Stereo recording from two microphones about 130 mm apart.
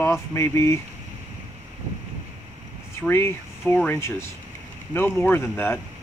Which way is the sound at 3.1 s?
15° left (ahead or behind).